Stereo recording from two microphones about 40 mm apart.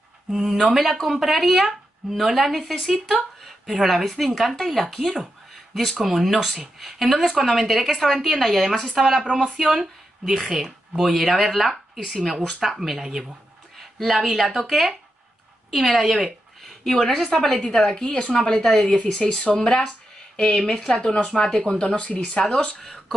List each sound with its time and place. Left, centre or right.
0.3 s speech: centre
3.6 s speech: centre
5.5 s a sound: centre
6.0 s speech: centre
11.9 s a woman's voice: centre
20.9 s speech: left
22.8 s speech: centre